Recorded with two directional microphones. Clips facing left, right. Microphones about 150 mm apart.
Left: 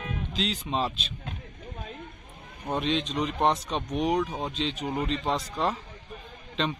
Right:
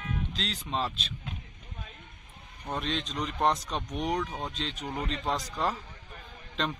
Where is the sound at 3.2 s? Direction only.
Centre (ahead or behind).